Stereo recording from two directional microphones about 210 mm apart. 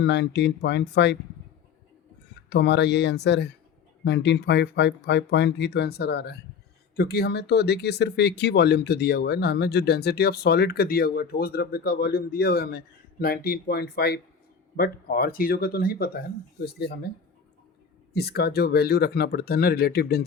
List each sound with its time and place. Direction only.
0.0 s speech: 55° left (ahead or behind)
2.5 s speech: 55° left (ahead or behind)
18.1 s speech: 50° left (ahead or behind)